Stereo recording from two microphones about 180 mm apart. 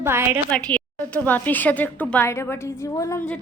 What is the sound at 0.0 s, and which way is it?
Speech, 15° right (ahead or behind).